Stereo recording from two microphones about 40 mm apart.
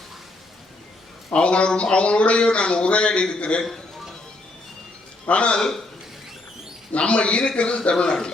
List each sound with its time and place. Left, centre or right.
1.3 s speech: left
5.2 s speech: left
5.5 s a man's voice: centre
6.9 s speech: left